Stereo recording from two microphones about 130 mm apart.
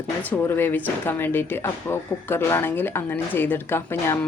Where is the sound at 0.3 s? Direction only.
15° left (ahead or behind).